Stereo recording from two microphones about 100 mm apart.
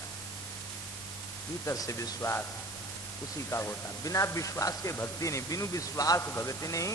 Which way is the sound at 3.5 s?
30° left (ahead or behind).